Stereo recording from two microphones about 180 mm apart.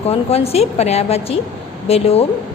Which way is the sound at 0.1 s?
35° left (ahead or behind).